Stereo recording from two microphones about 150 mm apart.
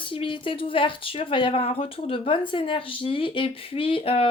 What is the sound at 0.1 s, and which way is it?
Speech, 35° left (ahead or behind).